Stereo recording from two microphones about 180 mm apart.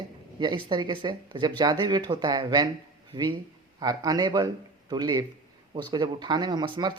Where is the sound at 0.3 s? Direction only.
25° right (ahead or behind).